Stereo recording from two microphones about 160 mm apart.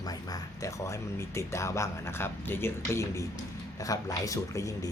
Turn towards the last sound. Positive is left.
turn(degrees=20)  # may be behind; listen again after turning